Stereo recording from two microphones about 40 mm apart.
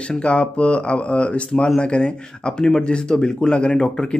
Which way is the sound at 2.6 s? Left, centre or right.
Centre.